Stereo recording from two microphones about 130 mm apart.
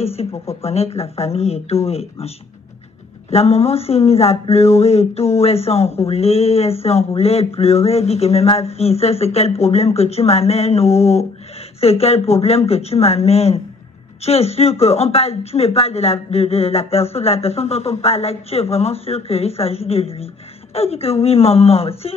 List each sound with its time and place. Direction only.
0.0 s speech: 50° left (ahead or behind)